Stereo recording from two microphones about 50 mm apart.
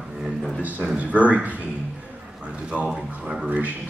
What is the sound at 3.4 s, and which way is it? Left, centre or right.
Speech, right.